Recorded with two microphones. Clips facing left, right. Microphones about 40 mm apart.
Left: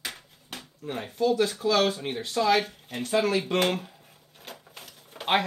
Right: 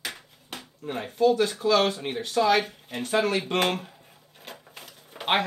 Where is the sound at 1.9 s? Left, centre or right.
Centre.